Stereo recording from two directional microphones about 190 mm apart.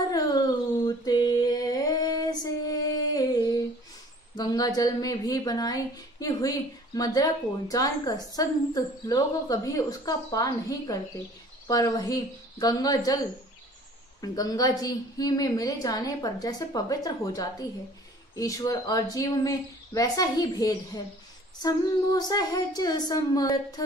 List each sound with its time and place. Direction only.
0.8 s mantra: 20° left (ahead or behind)
3.2 s a sound: 20° left (ahead or behind)
4.4 s a woman's voice: 20° left (ahead or behind)